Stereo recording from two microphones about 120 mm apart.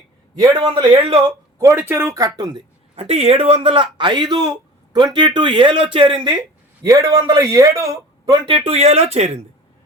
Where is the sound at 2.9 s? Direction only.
55° right (ahead or behind).